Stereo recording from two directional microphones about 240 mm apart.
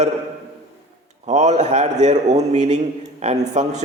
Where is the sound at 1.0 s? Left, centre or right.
Right.